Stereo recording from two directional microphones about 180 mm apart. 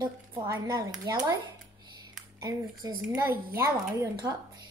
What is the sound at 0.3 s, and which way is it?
A woman's voice, 20° right (ahead or behind).